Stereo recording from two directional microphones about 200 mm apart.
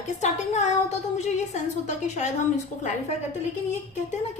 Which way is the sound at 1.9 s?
35° left (ahead or behind).